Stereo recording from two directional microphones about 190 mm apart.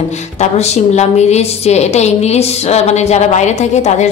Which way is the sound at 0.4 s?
35° left (ahead or behind).